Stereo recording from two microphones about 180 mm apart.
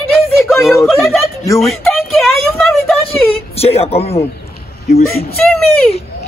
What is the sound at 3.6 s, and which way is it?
Speech, 35° left (ahead or behind).